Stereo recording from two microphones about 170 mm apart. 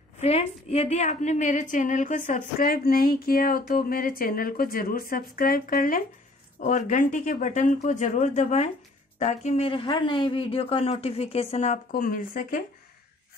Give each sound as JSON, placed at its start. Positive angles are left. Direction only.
{"t": 0.2, "sound": "a woman's voice", "side_deg": 40}
{"t": 11.9, "sound": "speech", "side_deg": 55}